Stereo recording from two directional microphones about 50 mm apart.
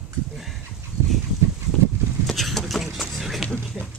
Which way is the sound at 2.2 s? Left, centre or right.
Centre.